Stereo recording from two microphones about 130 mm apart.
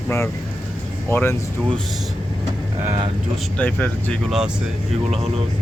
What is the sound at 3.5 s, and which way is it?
Speech, 10° left (ahead or behind).